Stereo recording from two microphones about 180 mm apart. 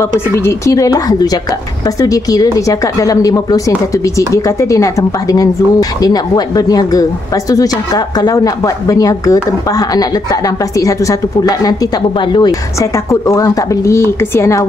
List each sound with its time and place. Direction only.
0.5 s speech: 20° left (ahead or behind)
13.1 s speech: 15° left (ahead or behind)